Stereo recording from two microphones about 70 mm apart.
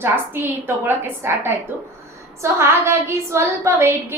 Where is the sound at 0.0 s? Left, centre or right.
Right.